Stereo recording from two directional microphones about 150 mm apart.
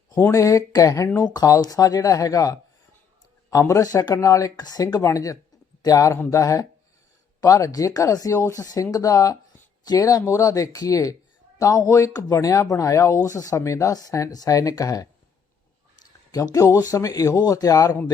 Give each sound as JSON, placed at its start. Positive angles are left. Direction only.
{"t": 0.1, "sound": "speech", "side_deg": 20}
{"t": 16.3, "sound": "speech", "side_deg": 20}